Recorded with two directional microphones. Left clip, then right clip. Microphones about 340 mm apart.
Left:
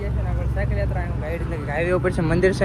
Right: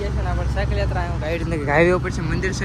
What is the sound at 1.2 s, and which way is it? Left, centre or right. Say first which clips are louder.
Speech: right 7 dB; centre.